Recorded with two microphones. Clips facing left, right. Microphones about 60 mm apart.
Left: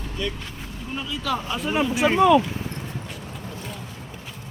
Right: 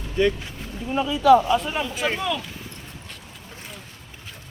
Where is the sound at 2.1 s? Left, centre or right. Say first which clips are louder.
Left 11 dB; left.